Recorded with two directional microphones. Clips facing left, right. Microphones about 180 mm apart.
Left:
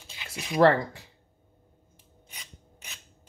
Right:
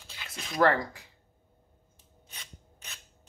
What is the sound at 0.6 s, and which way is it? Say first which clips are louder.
Speech: left 4 dB; 30° left (ahead or behind).